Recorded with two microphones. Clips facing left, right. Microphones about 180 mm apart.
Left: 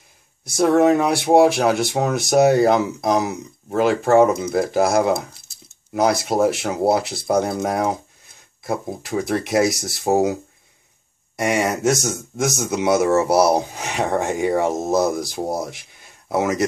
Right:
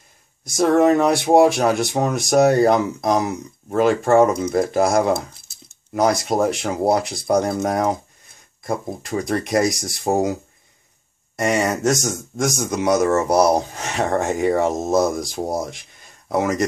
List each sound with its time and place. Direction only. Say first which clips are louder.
0.6 s speech: even; 5° left (ahead or behind)
11.3 s speech: right 1 dB; centre (ahead or behind)